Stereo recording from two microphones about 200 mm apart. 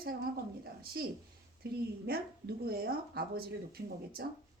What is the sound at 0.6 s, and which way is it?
A woman's voice, 50° right (ahead or behind).